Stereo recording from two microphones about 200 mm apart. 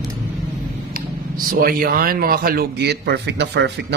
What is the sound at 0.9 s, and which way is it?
Speech, 45° right (ahead or behind).